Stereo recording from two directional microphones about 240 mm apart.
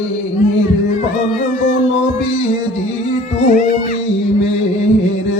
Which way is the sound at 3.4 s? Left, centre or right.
Left.